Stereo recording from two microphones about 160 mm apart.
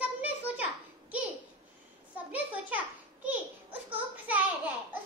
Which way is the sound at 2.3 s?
10° right (ahead or behind).